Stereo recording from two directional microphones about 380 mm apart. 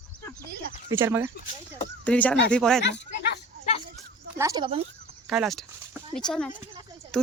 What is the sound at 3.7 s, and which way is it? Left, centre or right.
Children playing, centre.